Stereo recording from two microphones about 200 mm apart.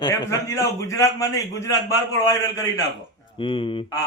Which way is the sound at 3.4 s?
25° left (ahead or behind).